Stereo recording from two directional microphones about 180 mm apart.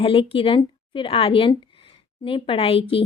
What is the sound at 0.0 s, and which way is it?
A woman's voice, 30° left (ahead or behind).